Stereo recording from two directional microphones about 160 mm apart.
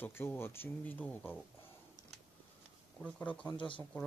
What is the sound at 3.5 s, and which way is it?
Speech, 30° left (ahead or behind).